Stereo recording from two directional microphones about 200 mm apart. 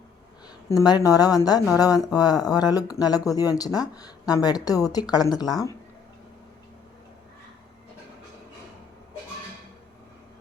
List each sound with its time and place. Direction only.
0.7 s speech: 20° left (ahead or behind)